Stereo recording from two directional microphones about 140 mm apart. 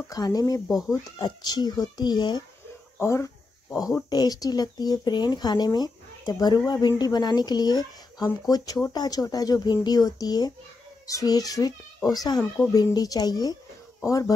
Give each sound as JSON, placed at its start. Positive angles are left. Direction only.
{"t": 0.1, "sound": "speech", "side_deg": 25}
{"t": 0.7, "sound": "speech", "side_deg": 0}
{"t": 1.1, "sound": "speech", "side_deg": 30}
{"t": 3.0, "sound": "speech", "side_deg": 20}